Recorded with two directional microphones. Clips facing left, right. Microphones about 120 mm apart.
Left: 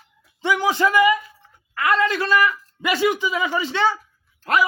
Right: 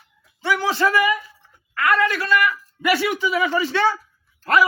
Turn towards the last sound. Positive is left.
turn(degrees=20)  # may be behind; listen again after turning